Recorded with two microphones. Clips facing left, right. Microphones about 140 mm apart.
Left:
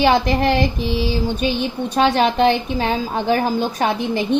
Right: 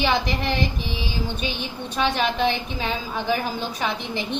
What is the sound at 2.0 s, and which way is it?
A woman's voice, 50° left (ahead or behind).